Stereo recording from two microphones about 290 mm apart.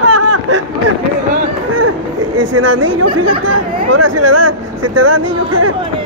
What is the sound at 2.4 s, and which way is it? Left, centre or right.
Speech, right.